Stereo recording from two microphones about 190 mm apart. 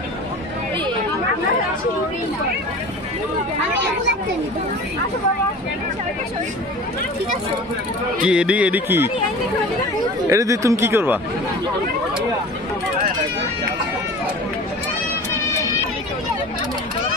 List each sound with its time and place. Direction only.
8.2 s speech: 5° right (ahead or behind)
10.3 s speech: 15° right (ahead or behind)